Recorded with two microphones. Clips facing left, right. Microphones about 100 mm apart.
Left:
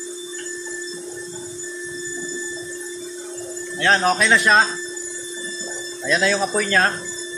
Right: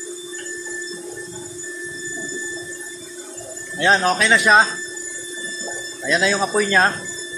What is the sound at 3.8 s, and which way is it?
Speech, 15° right (ahead or behind).